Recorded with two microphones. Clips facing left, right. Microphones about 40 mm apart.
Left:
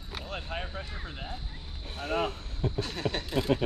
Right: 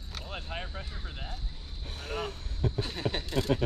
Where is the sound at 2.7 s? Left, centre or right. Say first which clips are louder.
Left 1 dB; centre.